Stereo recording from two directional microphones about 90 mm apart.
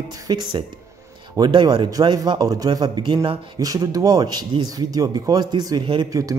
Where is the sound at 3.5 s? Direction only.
40° right (ahead or behind).